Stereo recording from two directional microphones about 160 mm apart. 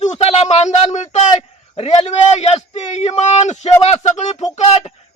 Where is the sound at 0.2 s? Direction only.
40° left (ahead or behind).